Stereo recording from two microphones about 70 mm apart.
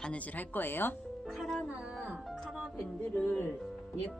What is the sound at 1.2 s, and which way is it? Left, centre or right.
Speech, centre.